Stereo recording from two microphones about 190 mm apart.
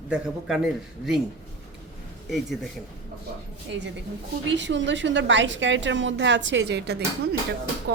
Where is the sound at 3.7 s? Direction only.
70° right (ahead or behind).